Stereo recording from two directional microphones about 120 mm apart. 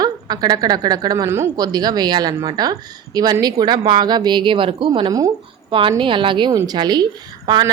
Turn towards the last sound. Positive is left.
turn(degrees=-35)  # may be behind; listen again after turning